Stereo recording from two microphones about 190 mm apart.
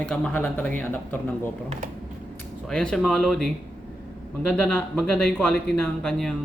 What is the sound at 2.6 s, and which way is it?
Speech, 5° left (ahead or behind).